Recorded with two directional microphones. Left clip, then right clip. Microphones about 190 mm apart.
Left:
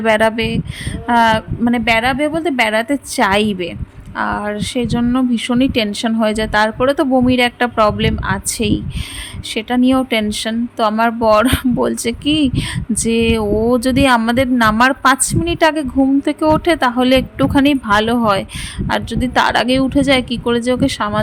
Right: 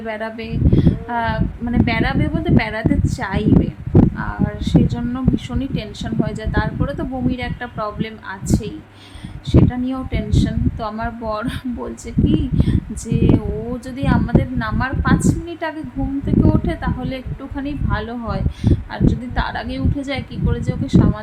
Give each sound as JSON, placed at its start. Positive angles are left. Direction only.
{"t": 0.0, "sound": "a woman's voice", "side_deg": 55}